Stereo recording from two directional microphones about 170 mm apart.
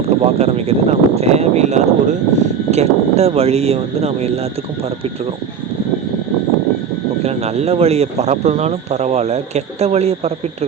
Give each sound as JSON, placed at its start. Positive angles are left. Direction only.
{"t": 0.2, "sound": "speech", "side_deg": -35}
{"t": 7.2, "sound": "speech", "side_deg": -40}